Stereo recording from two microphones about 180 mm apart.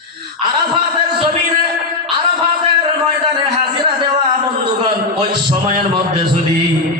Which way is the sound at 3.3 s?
25° right (ahead or behind).